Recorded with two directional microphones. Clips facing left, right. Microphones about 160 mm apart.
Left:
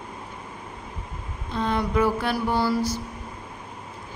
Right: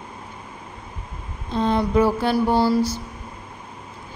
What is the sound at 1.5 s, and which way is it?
Mantra, 30° right (ahead or behind).